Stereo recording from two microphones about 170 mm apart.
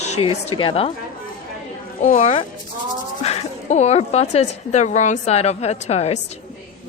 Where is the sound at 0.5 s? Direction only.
30° left (ahead or behind).